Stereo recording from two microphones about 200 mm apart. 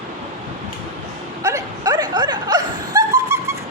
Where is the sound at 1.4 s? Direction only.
15° right (ahead or behind).